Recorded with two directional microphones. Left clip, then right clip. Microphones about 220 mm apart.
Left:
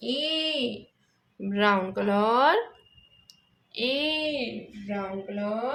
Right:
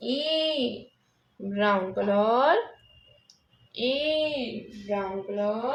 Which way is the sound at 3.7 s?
35° left (ahead or behind).